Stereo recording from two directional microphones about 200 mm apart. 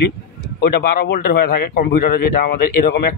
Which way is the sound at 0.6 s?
50° left (ahead or behind).